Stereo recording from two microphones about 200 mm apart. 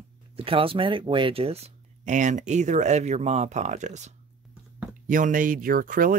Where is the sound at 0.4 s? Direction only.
25° right (ahead or behind).